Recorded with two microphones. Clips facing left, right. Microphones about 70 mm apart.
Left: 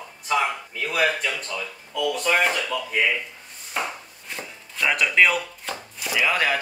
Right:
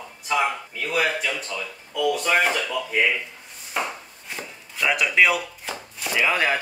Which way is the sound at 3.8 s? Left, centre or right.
Centre.